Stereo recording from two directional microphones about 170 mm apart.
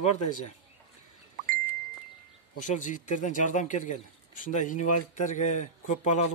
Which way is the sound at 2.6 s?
45° left (ahead or behind).